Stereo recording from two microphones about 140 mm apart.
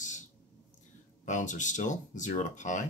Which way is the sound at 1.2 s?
65° left (ahead or behind).